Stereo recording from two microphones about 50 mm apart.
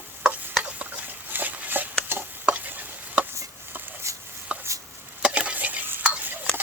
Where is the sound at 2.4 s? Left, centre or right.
Right.